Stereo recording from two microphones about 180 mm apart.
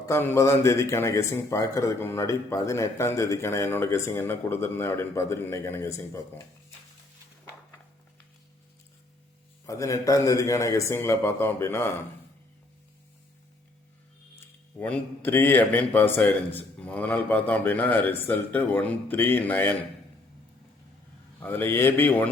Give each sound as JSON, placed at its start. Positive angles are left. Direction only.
{"t": 0.0, "sound": "speech", "side_deg": 15}
{"t": 9.6, "sound": "speech", "side_deg": 20}
{"t": 14.8, "sound": "speech", "side_deg": 10}
{"t": 21.4, "sound": "speech", "side_deg": 10}